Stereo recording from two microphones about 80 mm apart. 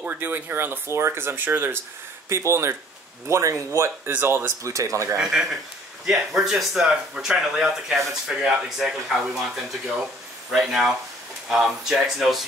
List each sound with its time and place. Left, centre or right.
0.0 s speech: right
2.2 s speech: right
5.1 s speech: centre
10.5 s speech: centre